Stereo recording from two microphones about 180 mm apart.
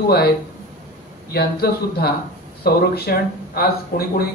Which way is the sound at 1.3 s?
60° left (ahead or behind).